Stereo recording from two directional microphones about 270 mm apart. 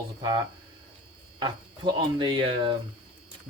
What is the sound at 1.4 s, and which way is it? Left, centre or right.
Speech, centre.